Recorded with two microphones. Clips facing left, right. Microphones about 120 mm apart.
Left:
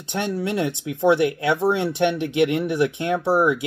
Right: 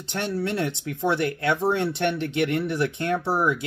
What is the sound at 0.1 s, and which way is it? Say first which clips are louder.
Speech: left 3 dB; 15° left (ahead or behind).